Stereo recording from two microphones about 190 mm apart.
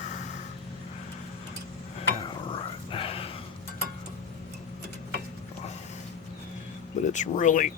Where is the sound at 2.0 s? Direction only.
25° left (ahead or behind).